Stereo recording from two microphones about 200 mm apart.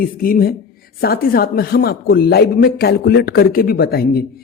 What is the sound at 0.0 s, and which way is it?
Speech, 45° left (ahead or behind).